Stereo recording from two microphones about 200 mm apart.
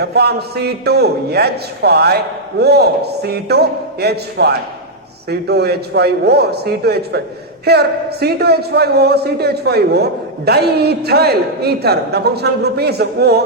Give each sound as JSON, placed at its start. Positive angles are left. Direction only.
{"t": 0.0, "sound": "a man's voice", "side_deg": -55}